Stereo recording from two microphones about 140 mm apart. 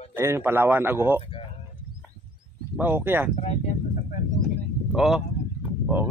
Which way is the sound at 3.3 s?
55° left (ahead or behind).